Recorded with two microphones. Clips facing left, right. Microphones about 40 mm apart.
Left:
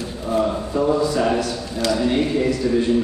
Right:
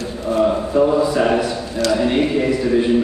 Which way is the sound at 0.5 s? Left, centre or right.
Centre.